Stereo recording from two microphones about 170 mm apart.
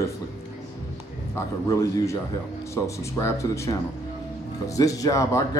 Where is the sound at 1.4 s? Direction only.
20° left (ahead or behind).